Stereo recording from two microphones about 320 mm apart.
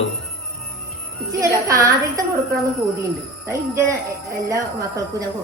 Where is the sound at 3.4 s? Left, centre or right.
Centre.